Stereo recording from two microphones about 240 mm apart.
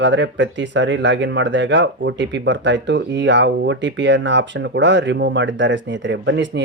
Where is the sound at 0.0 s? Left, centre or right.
Right.